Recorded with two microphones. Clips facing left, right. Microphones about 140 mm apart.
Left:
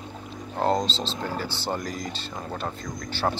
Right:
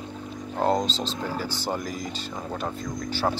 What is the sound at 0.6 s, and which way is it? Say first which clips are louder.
Speech: even; 10° right (ahead or behind).